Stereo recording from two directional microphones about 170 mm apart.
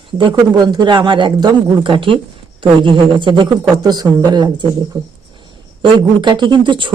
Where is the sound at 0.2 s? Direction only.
25° right (ahead or behind).